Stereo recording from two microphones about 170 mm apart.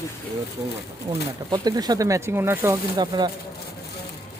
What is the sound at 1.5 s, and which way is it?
Speech, 25° right (ahead or behind).